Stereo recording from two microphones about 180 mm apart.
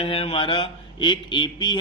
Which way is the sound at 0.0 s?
30° left (ahead or behind).